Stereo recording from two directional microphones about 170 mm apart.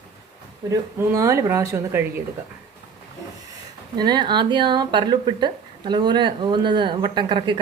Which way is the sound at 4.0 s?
25° right (ahead or behind).